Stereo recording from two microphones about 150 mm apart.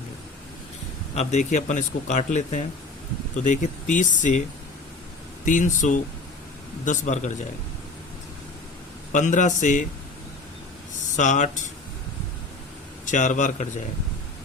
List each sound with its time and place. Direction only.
1.1 s speech: 45° left (ahead or behind)
5.5 s speech: 55° left (ahead or behind)
9.1 s speech: 55° left (ahead or behind)
11.2 s speech: 55° left (ahead or behind)
13.1 s speech: 55° left (ahead or behind)